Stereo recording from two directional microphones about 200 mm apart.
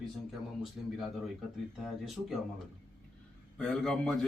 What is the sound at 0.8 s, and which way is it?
Speech, 5° right (ahead or behind).